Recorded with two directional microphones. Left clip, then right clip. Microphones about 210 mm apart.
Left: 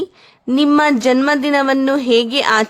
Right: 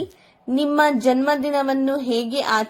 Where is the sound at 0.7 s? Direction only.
45° left (ahead or behind).